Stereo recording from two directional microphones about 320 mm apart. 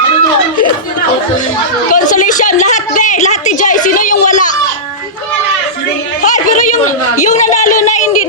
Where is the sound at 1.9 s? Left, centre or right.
Left.